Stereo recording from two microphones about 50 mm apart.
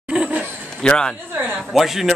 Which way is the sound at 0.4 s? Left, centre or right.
Centre.